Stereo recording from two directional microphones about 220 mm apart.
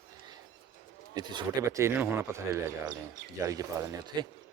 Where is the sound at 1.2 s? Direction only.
15° right (ahead or behind).